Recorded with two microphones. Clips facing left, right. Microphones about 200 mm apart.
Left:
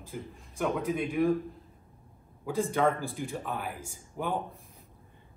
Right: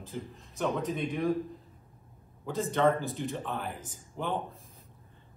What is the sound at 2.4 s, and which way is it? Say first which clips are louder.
Speech: even; 5° left (ahead or behind).